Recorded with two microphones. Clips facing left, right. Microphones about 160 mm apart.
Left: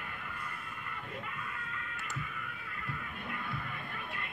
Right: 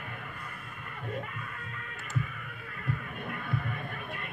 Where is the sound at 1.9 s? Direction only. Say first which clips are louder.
Right 10 dB; 45° right (ahead or behind).